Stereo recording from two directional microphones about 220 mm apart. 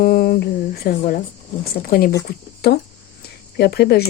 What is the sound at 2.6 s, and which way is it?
Speech, 45° left (ahead or behind).